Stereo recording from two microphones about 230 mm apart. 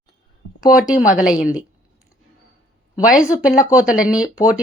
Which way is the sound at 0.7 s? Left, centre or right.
Centre.